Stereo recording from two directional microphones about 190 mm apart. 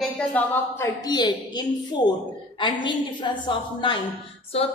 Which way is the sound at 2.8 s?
25° left (ahead or behind).